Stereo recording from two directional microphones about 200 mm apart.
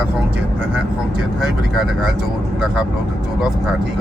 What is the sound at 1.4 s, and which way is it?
Speech, centre (ahead or behind).